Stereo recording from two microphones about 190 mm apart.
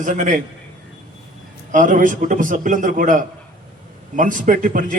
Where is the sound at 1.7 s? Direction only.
45° right (ahead or behind).